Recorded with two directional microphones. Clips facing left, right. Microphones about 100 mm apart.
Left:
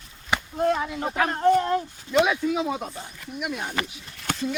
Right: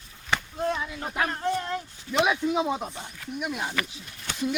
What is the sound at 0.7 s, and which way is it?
Speech, 45° left (ahead or behind).